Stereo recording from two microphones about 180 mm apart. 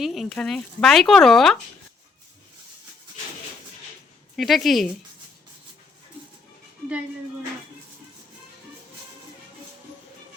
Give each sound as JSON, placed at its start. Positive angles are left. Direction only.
{"t": 0.0, "sound": "speech", "side_deg": 0}
{"t": 4.4, "sound": "speech", "side_deg": 0}